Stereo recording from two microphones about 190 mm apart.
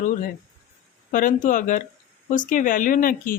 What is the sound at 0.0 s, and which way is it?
Speech, 45° left (ahead or behind).